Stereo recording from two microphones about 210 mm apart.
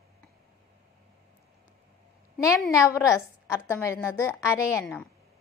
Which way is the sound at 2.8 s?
15° left (ahead or behind).